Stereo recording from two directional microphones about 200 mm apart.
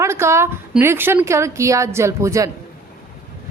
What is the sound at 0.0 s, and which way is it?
A woman's voice, 15° right (ahead or behind).